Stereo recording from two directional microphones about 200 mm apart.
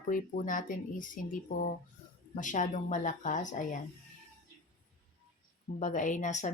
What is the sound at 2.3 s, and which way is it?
Speech, 40° left (ahead or behind).